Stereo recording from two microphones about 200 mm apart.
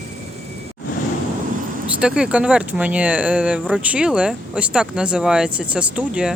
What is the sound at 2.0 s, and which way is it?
Speech, 5° right (ahead or behind).